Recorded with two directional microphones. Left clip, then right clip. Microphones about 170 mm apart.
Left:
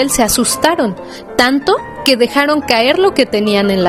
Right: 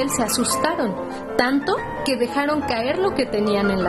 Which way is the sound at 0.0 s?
40° left (ahead or behind).